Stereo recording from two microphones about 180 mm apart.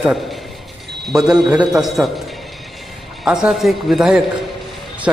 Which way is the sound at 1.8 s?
Centre (ahead or behind).